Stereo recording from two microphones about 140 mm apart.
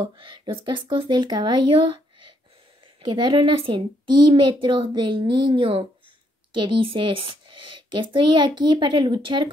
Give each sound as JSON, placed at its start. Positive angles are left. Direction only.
{"t": 0.0, "sound": "a woman's voice", "side_deg": -35}
{"t": 3.0, "sound": "a woman's voice", "side_deg": -35}